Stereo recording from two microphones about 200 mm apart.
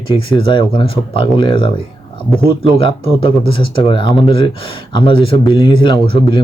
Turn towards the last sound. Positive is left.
turn(degrees=25)  # may be behind; listen again after turning